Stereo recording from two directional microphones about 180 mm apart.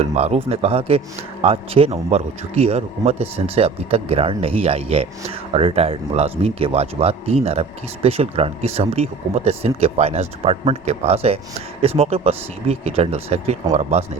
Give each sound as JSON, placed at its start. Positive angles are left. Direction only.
{"t": 0.0, "sound": "speech", "side_deg": -35}